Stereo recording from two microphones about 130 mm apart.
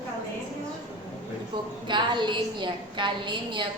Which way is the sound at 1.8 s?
35° right (ahead or behind).